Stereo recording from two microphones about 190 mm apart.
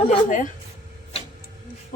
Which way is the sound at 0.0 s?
30° left (ahead or behind).